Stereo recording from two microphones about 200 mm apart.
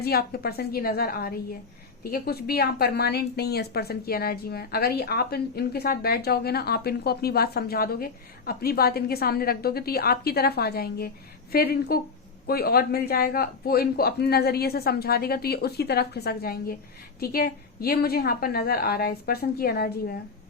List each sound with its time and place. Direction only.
0.0 s a woman's voice: 50° left (ahead or behind)